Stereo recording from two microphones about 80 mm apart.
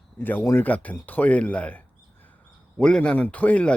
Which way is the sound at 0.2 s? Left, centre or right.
Left.